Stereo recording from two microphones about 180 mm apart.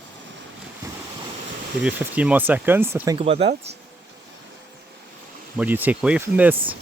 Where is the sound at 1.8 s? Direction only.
10° right (ahead or behind).